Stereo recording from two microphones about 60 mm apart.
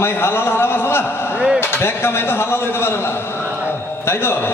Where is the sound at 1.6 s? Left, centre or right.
Left.